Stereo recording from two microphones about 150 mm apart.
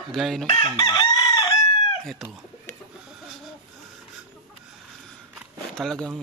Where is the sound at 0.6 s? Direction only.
30° left (ahead or behind).